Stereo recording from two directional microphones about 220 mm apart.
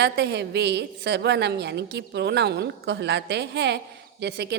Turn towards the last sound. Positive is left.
turn(degrees=-50)  # may be behind; listen again after turning